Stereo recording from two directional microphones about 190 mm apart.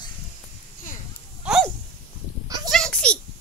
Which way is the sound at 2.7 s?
5° left (ahead or behind).